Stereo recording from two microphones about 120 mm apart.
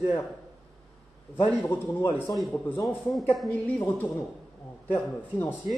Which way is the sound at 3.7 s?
10° left (ahead or behind).